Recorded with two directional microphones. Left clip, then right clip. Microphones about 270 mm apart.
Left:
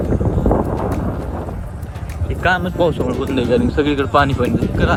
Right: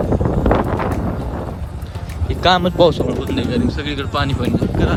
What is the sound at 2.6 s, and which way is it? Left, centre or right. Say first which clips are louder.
Speech: right 4 dB; right.